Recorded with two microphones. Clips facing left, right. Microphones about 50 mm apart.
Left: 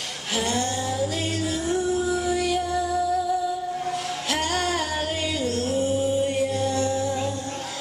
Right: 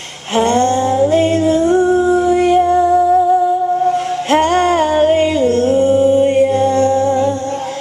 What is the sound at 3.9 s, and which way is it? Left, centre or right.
Music, right.